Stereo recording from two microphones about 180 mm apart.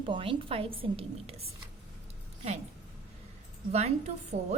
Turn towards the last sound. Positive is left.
turn(degrees=-40)  # may be behind; listen again after turning